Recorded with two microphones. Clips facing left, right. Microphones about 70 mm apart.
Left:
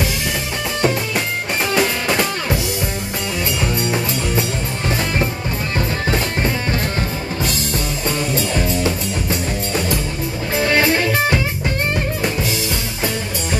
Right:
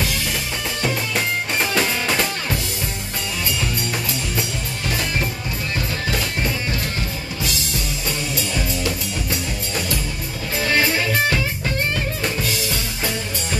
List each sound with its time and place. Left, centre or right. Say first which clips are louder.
1.8 s music: left 4 dB; centre
3.9 s music: left 5 dB; left
5.8 s music: left 5 dB; left
10.6 s music: left 4 dB; left